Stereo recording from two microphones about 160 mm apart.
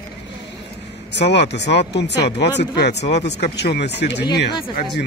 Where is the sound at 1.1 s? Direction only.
90° left.